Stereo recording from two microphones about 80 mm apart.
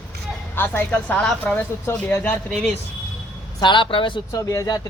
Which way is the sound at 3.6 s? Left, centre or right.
Left.